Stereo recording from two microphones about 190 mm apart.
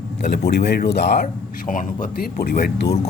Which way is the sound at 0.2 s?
60° left (ahead or behind).